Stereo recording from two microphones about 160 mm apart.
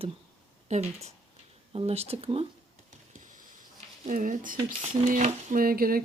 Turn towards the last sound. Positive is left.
turn(degrees=-65)  # may be behind; listen again after turning